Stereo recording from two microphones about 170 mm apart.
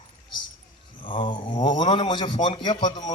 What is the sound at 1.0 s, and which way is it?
A man's voice, 30° left (ahead or behind).